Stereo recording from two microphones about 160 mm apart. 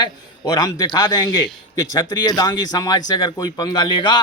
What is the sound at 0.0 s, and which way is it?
Speech, 25° left (ahead or behind).